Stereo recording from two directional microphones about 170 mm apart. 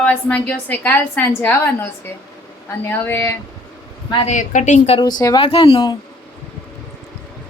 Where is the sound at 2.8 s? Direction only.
10° left (ahead or behind).